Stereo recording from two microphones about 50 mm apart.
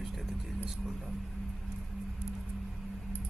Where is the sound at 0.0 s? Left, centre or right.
Centre.